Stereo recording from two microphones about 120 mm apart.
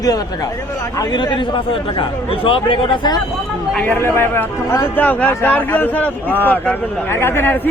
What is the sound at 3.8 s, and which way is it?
A man's voice, 15° left (ahead or behind).